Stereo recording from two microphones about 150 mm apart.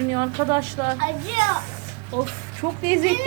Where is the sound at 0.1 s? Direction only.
20° right (ahead or behind).